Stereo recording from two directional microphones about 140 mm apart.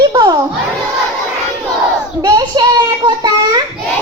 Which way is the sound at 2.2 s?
25° right (ahead or behind).